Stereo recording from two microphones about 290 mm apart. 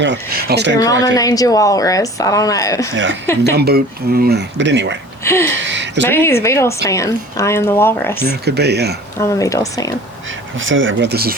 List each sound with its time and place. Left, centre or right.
0.0 s speech: right
0.8 s a woman's voice: centre
2.9 s speech: right
5.2 s a sound: centre
5.6 s a sound: right
6.1 s a woman's voice: centre
8.3 s speech: right
9.2 s a woman's voice: centre
10.6 s speech: right